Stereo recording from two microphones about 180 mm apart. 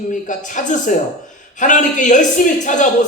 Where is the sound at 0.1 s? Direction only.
45° left (ahead or behind).